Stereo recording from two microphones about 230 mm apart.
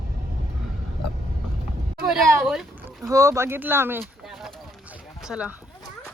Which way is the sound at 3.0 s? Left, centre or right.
Centre.